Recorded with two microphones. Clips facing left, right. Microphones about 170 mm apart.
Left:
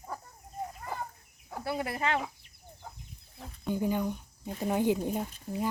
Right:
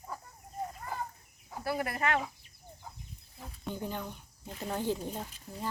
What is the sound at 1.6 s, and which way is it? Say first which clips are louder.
Speech: even; 20° left (ahead or behind).